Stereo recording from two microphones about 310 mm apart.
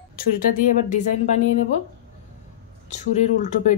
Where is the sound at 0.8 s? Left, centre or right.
Left.